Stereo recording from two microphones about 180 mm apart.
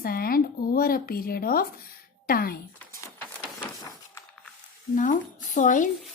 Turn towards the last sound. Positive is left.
turn(degrees=45)  # may be behind; listen again after turning